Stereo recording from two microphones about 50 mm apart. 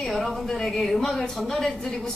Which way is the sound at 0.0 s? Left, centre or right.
Centre.